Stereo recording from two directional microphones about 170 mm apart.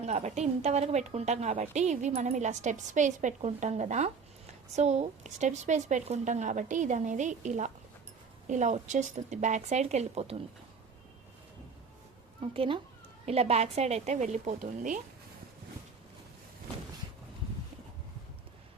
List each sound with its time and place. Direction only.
0.0 s a woman's voice: 40° right (ahead or behind)
12.4 s a woman's voice: 30° right (ahead or behind); by 15.0 s 45° right (ahead or behind)